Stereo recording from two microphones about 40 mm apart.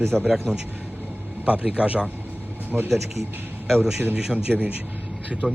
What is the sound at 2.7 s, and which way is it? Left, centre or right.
A man's voice, centre.